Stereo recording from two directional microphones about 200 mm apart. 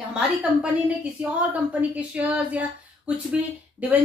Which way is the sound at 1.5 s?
5° right (ahead or behind).